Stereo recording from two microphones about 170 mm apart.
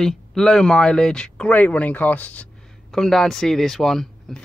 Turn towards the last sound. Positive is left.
turn(degrees=0)  # may be behind; listen again after turning